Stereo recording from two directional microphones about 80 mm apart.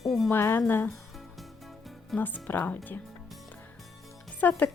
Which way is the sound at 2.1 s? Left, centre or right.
Left.